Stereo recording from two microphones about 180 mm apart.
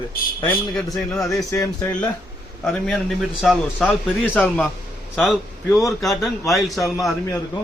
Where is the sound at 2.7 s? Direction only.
5° left (ahead or behind).